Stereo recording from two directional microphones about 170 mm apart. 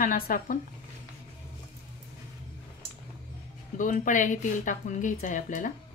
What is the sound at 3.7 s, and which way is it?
A woman's voice, 50° left (ahead or behind).